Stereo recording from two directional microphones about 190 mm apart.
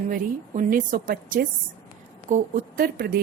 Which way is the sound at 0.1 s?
45° right (ahead or behind).